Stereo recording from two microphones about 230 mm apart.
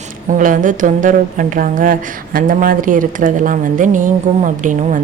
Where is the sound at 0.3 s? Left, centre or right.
Right.